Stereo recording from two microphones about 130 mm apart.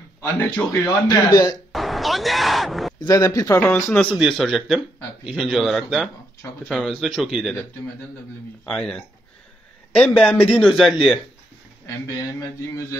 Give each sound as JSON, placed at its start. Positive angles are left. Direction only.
{"t": 0.2, "sound": "speech", "side_deg": 15}
{"t": 1.0, "sound": "speech", "side_deg": 30}
{"t": 1.7, "sound": "speech", "side_deg": 0}
{"t": 3.1, "sound": "speech", "side_deg": 25}
{"t": 4.2, "sound": "a man's voice", "side_deg": 0}
{"t": 8.6, "sound": "a man's voice", "side_deg": 5}